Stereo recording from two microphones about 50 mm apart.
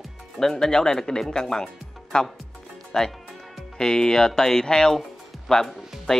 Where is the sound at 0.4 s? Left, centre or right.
Centre.